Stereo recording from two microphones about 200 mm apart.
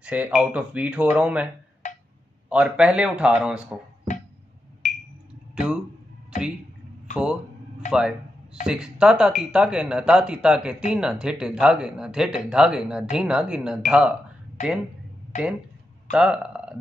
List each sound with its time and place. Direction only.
0.0 s speech: 5° right (ahead or behind)
1.8 s a sound: 40° left (ahead or behind)
2.5 s speech: 5° right (ahead or behind)
4.1 s music: 40° left (ahead or behind)
4.8 s a sound: 40° left (ahead or behind)
5.5 s a sound: 5° right (ahead or behind)
8.6 s speech: 5° right (ahead or behind)
14.6 s speech: 40° left (ahead or behind)
16.1 s speech: 5° right (ahead or behind)